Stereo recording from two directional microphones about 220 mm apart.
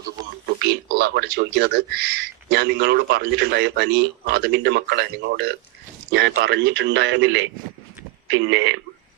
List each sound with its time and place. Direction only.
0.6 s a man's voice: 45° right (ahead or behind); by 8.7 s 65° right (ahead or behind)